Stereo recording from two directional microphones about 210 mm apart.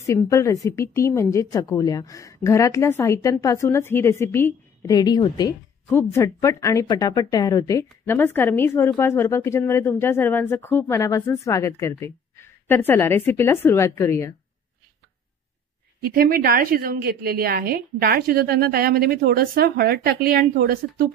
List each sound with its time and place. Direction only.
0.0 s a woman's voice: 15° left (ahead or behind)
16.0 s a woman's voice: 45° right (ahead or behind)